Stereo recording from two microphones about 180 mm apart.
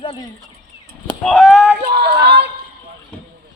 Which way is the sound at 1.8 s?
60° right (ahead or behind).